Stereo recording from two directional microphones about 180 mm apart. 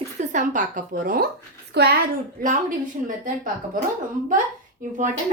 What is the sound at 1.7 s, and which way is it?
Speech, 65° right (ahead or behind).